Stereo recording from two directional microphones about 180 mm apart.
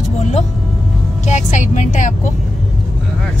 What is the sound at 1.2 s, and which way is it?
A woman's voice, 40° left (ahead or behind).